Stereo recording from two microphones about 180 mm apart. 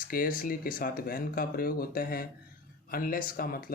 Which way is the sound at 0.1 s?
50° left (ahead or behind).